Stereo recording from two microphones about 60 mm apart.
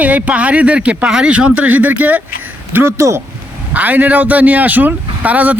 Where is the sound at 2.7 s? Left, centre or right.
Right.